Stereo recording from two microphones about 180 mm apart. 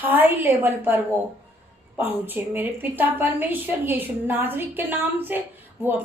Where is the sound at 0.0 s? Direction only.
10° right (ahead or behind).